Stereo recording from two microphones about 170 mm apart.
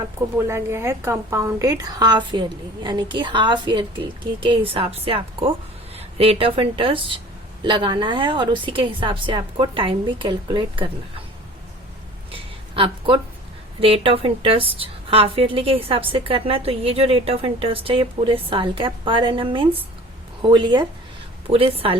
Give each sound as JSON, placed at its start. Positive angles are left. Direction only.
{"t": 0.3, "sound": "a woman's voice", "side_deg": -15}
{"t": 12.3, "sound": "a sound", "side_deg": -30}
{"t": 13.8, "sound": "a woman's voice", "side_deg": -35}